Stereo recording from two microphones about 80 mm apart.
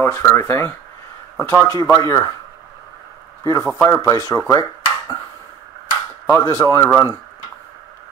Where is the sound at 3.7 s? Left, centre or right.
Left.